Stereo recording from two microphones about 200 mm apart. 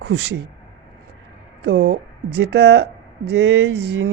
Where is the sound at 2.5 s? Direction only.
55° right (ahead or behind).